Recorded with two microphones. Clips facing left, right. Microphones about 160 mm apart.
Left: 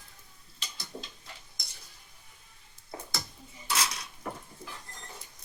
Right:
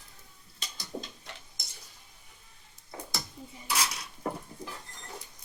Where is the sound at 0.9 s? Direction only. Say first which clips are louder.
Right 5 dB; 30° right (ahead or behind).